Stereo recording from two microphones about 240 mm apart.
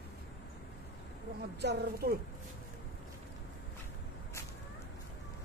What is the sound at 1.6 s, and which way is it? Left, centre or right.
Speech, right.